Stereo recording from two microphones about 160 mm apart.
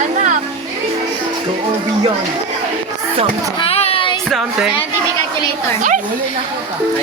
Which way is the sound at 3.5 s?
35° left (ahead or behind).